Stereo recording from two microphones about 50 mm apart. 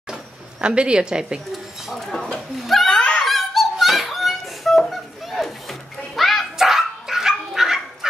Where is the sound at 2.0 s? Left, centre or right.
Centre.